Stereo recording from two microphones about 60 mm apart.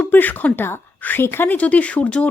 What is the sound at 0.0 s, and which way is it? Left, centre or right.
Speech, left.